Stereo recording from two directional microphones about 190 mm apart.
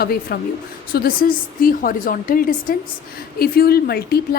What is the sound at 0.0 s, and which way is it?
A woman's voice, 55° left (ahead or behind).